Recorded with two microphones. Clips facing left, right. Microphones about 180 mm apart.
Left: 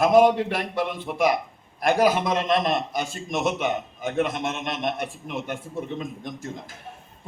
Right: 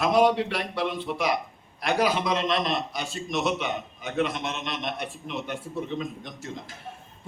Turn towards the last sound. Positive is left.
turn(degrees=50)  # may be behind; listen again after turning